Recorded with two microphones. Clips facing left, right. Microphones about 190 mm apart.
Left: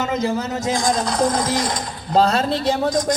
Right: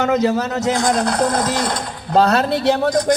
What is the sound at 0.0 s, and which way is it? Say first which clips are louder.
A man's voice: right 5 dB; 70° right (ahead or behind).